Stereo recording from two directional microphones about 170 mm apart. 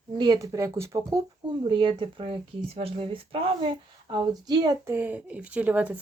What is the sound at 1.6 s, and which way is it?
Speech, 30° right (ahead or behind).